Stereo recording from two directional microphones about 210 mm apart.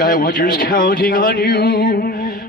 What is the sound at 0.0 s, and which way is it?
Speech, 40° left (ahead or behind).